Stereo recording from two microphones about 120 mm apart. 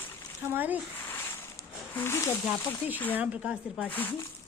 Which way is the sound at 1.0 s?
20° left (ahead or behind).